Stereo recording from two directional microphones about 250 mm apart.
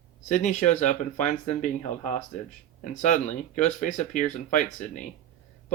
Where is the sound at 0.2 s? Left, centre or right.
Left.